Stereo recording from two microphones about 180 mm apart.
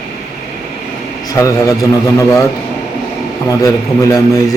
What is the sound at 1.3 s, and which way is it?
A man's voice, 15° left (ahead or behind).